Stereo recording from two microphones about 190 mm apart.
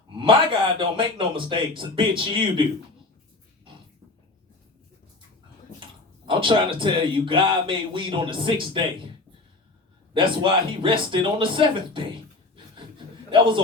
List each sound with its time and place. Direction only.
0.1 s speech: 25° right (ahead or behind)
6.2 s speech: 25° right (ahead or behind)
10.2 s speech: 25° right (ahead or behind)
13.3 s speech: 25° right (ahead or behind)